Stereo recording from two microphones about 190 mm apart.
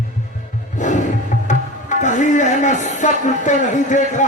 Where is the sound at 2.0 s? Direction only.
40° left (ahead or behind).